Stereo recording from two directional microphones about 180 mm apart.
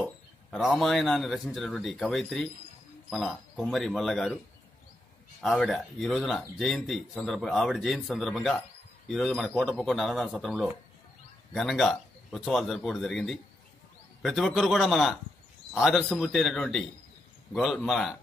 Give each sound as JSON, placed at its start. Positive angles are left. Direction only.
{"t": 0.0, "sound": "speech", "side_deg": 0}
{"t": 5.4, "sound": "speech", "side_deg": 0}